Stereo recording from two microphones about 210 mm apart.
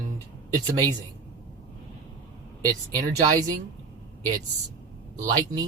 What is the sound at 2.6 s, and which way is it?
Speech, 15° right (ahead or behind).